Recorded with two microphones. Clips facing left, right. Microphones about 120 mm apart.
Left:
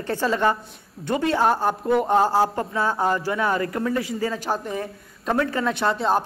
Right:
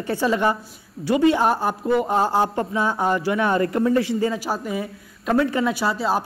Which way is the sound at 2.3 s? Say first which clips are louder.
Even; 20° right (ahead or behind).